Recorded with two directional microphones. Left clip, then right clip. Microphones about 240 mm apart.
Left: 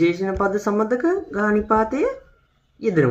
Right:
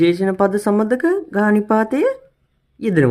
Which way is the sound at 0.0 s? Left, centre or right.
Right.